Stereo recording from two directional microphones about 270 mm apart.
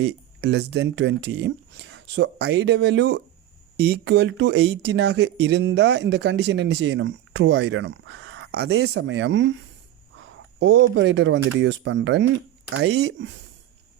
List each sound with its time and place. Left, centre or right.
0.0 s speech: right
10.6 s speech: right